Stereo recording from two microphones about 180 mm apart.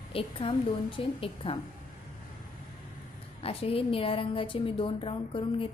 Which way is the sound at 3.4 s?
30° left (ahead or behind).